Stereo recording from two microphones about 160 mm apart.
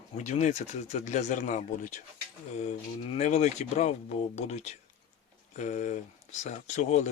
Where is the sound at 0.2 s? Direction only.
45° left (ahead or behind).